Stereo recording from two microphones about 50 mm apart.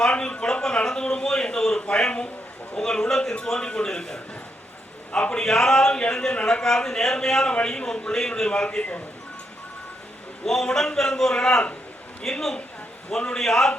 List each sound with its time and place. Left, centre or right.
0.0 s a sound: centre
2.7 s a man's voice: centre
10.4 s a man's voice: centre